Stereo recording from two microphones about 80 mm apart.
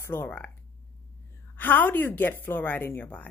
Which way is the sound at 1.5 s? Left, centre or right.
Left.